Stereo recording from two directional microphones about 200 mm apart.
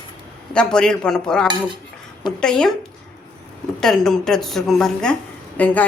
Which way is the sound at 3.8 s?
5° left (ahead or behind).